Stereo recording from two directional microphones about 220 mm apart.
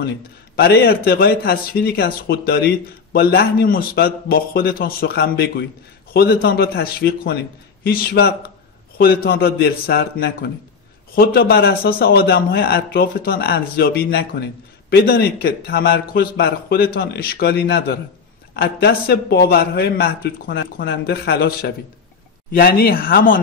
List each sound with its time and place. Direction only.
0.6 s speech: 45° left (ahead or behind)